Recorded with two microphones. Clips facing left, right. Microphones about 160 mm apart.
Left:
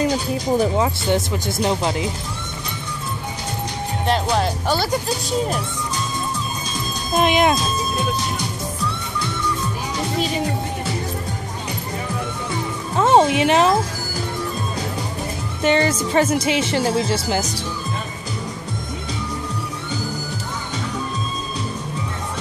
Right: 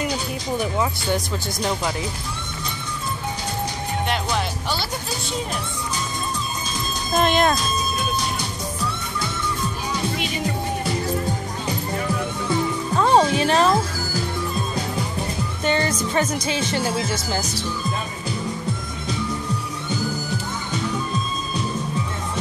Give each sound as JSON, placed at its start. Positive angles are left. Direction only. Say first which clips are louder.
{"t": 0.6, "sound": "speech", "louder": "left 2 dB", "side_deg": 30}
{"t": 4.1, "sound": "speech", "louder": "left 8 dB", "side_deg": 35}
{"t": 7.2, "sound": "speech", "louder": "left 2 dB", "side_deg": 15}
{"t": 12.9, "sound": "music", "louder": "left 3 dB", "side_deg": 20}
{"t": 15.6, "sound": "speech", "louder": "left 5 dB", "side_deg": 25}